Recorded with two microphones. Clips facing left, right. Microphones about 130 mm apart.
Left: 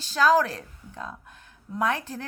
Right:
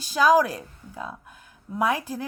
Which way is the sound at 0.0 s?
10° right (ahead or behind).